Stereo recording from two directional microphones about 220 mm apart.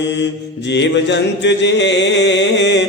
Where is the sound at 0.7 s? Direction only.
55° left (ahead or behind).